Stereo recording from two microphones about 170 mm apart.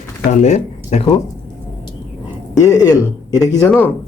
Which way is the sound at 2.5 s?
20° left (ahead or behind).